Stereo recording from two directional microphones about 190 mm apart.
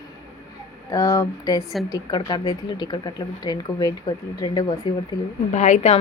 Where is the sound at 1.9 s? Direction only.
20° left (ahead or behind).